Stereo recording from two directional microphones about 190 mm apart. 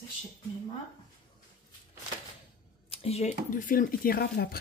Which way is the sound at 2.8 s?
35° left (ahead or behind).